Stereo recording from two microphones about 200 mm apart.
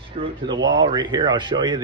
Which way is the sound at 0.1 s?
35° right (ahead or behind).